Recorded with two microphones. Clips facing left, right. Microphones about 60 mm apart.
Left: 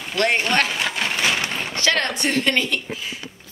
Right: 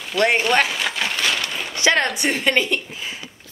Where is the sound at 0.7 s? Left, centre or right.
Centre.